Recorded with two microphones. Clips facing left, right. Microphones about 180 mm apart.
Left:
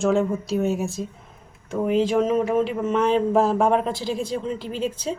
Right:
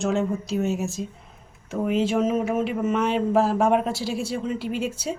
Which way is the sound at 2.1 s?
5° right (ahead or behind).